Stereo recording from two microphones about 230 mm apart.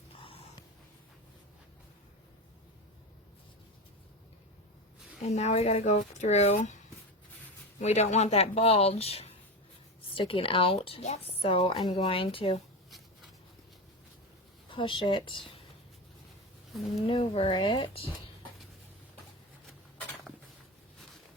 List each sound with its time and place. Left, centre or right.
0.2 s snort: left
5.2 s speech: left
14.7 s speech: left
17.1 s speech: left